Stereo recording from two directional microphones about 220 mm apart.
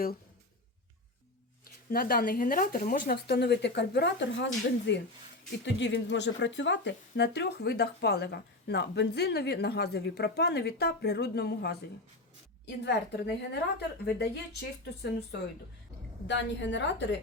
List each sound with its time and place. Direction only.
1.9 s a woman's voice: 40° left (ahead or behind)